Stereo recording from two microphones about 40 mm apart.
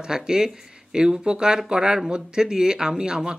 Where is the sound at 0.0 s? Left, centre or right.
Centre.